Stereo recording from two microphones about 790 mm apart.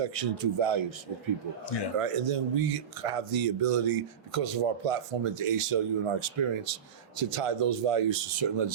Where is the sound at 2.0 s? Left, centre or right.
Right.